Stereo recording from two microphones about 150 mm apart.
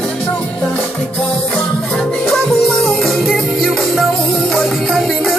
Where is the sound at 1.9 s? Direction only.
5° left (ahead or behind).